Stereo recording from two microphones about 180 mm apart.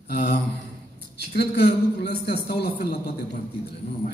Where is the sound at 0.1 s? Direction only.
65° left (ahead or behind).